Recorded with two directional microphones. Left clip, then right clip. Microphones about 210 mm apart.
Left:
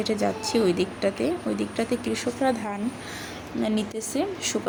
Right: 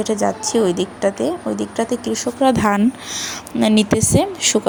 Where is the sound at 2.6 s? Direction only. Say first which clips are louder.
Right 14 dB; 45° right (ahead or behind).